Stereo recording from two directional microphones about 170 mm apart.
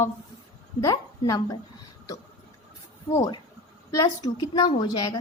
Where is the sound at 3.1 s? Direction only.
20° left (ahead or behind).